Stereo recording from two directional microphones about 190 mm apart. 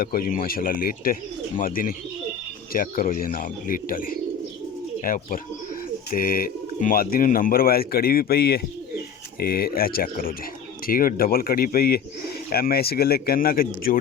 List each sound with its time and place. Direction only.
0.0 s speech: 50° left (ahead or behind)